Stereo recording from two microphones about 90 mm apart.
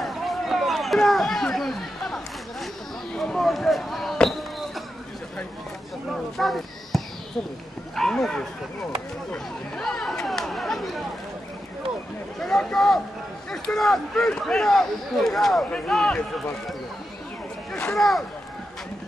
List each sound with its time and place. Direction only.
0.0 s a sound: centre (ahead or behind)
3.2 s speech: 5° left (ahead or behind)
6.1 s speech: centre (ahead or behind)
12.4 s speech: 5° left (ahead or behind)
17.9 s speech: centre (ahead or behind)